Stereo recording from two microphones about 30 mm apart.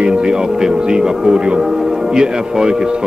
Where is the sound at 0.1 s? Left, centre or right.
Right.